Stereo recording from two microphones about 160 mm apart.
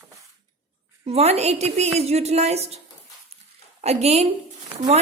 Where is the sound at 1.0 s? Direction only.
40° right (ahead or behind).